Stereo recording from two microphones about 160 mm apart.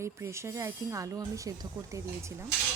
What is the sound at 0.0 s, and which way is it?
Speech, 15° right (ahead or behind).